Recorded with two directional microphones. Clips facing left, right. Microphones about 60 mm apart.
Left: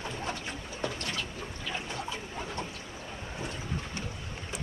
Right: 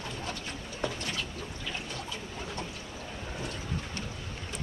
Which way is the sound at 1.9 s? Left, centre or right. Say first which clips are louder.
Left 2 dB; left.